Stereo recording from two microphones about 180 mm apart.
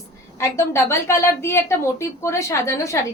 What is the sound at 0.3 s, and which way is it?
A woman's voice, 15° left (ahead or behind).